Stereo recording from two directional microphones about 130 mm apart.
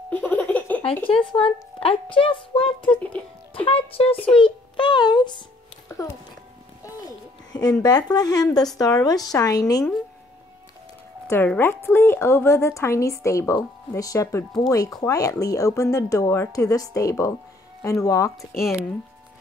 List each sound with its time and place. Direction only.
0.1 s giggle: 15° left (ahead or behind)
0.8 s a woman's voice: 45° left (ahead or behind)
2.9 s speech: 10° left (ahead or behind)
3.5 s a woman's voice: 45° left (ahead or behind)
6.8 s a sound: 30° left (ahead or behind)
7.8 s a woman's voice: 30° left (ahead or behind)
11.2 s a woman's voice: 15° left (ahead or behind)